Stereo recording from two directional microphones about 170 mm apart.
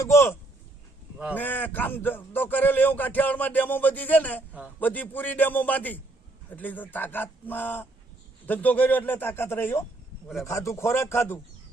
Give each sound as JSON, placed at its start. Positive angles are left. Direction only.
{"t": 0.0, "sound": "a man's voice", "side_deg": 15}
{"t": 1.4, "sound": "a man's voice", "side_deg": 10}